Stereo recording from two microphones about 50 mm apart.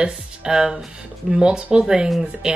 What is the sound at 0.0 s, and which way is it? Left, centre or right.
Speech, centre.